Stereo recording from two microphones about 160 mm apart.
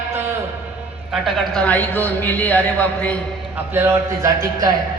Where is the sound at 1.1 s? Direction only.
Centre (ahead or behind).